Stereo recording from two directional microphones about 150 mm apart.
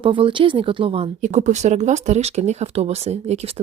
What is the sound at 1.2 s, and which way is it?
Speech, 55° right (ahead or behind).